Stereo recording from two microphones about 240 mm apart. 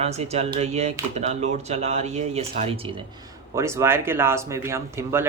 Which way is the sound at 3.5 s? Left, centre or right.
Centre.